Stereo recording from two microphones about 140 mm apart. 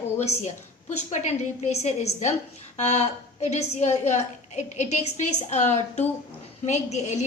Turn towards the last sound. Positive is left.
turn(degrees=55)  # may be behind; listen again after turning